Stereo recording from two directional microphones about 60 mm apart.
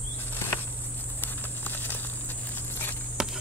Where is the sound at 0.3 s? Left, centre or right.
Left.